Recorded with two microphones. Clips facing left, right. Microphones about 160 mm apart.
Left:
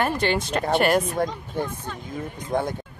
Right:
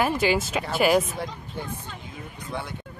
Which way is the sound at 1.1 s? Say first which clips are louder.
Left 8 dB; 45° left (ahead or behind).